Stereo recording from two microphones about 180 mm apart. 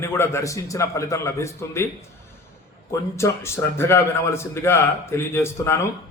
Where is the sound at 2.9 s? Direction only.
15° left (ahead or behind).